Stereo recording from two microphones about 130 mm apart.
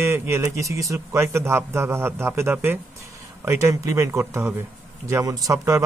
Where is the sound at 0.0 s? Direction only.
20° right (ahead or behind).